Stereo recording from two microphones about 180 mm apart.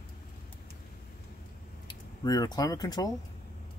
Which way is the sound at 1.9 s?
20° left (ahead or behind).